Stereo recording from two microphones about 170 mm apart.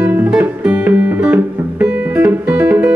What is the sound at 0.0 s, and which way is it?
Music, 10° right (ahead or behind).